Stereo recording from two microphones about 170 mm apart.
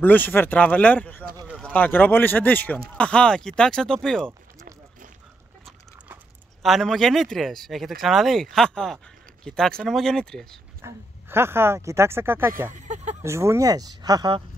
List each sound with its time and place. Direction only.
0.0 s speech: 10° left (ahead or behind)
6.6 s speech: centre (ahead or behind)
10.8 s speech: 15° right (ahead or behind)
12.7 s a sound: 45° right (ahead or behind)
13.2 s speech: 15° right (ahead or behind)